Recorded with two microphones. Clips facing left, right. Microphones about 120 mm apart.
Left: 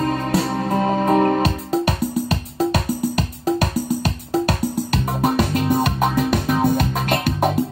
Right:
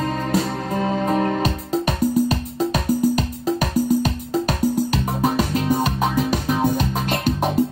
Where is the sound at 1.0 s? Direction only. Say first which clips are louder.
Left 6 dB; 45° left (ahead or behind).